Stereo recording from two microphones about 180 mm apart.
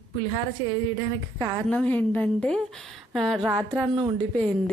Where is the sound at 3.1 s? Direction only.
5° left (ahead or behind).